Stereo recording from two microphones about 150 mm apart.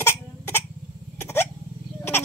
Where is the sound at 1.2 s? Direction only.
15° left (ahead or behind).